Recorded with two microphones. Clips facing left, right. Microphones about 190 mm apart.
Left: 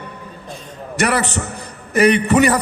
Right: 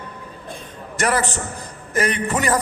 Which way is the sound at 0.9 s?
70° left (ahead or behind).